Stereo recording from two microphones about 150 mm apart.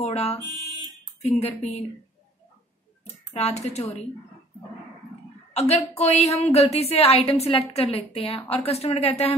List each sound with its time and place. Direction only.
0.0 s fire alarm: 45° left (ahead or behind)
1.2 s a woman's voice: 45° left (ahead or behind)
3.3 s a woman's voice: 45° left (ahead or behind)
5.5 s a woman's voice: 45° left (ahead or behind)